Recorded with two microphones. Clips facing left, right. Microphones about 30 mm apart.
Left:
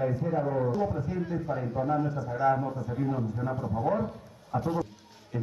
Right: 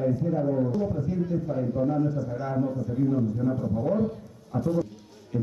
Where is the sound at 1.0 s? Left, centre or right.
Centre.